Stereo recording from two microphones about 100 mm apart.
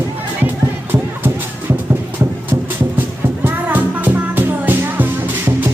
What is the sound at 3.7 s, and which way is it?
Music, 20° right (ahead or behind).